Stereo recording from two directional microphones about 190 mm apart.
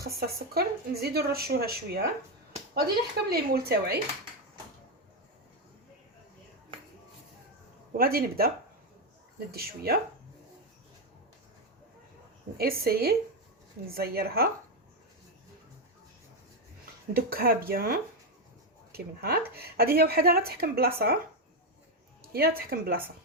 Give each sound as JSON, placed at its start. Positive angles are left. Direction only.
{"t": 0.2, "sound": "speech", "side_deg": -55}
{"t": 3.2, "sound": "speech", "side_deg": -55}
{"t": 7.9, "sound": "speech", "side_deg": -50}
{"t": 12.5, "sound": "speech", "side_deg": -55}
{"t": 17.2, "sound": "speech", "side_deg": -50}
{"t": 22.2, "sound": "a woman's voice", "side_deg": -55}